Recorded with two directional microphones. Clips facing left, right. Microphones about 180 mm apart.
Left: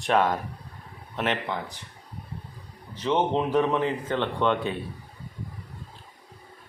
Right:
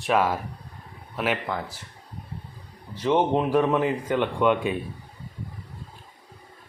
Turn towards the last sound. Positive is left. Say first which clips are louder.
# right 3 dB
turn(degrees=-10)  # may be behind; listen again after turning